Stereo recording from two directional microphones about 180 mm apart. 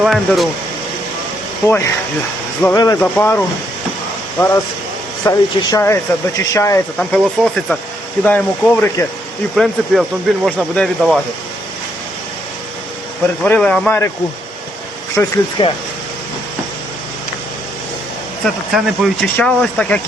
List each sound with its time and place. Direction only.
0.0 s speech: centre (ahead or behind)
1.6 s speech: 15° left (ahead or behind)
3.0 s speech: 10° left (ahead or behind)
5.2 s speech: 15° left (ahead or behind)
7.0 s speech: 5° left (ahead or behind)
9.6 s speech: centre (ahead or behind)
13.4 s speech: 5° left (ahead or behind)
15.1 s speech: 15° left (ahead or behind)
18.7 s speech: centre (ahead or behind)